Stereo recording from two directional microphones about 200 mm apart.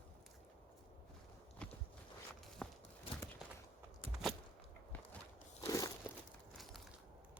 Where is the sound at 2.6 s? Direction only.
5° left (ahead or behind).